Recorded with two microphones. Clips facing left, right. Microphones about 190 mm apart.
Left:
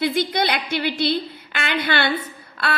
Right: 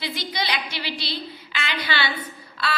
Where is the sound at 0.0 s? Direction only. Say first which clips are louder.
Left 9 dB; 55° left (ahead or behind).